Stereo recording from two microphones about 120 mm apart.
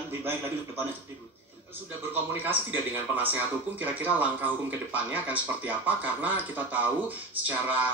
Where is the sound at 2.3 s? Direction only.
15° right (ahead or behind).